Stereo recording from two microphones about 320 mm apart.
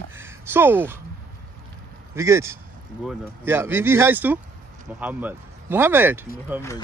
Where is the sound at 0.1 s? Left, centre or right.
Centre.